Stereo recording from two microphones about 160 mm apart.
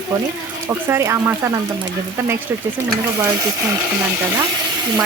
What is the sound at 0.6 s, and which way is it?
Speech, 15° right (ahead or behind).